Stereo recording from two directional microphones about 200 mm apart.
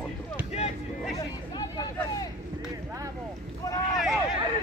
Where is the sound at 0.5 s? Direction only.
30° left (ahead or behind).